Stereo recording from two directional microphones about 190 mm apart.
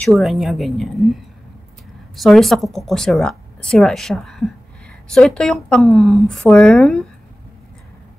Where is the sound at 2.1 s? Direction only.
Centre (ahead or behind).